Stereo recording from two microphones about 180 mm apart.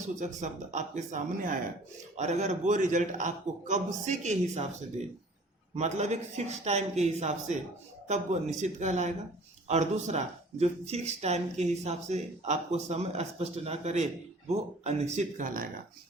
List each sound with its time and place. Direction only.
0.2 s speech: 40° right (ahead or behind)
5.7 s speech: 40° right (ahead or behind)